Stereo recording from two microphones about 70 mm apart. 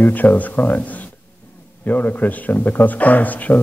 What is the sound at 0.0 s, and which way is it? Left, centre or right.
Speech, left.